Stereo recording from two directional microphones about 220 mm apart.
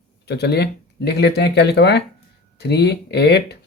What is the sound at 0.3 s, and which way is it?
Speech, 50° left (ahead or behind).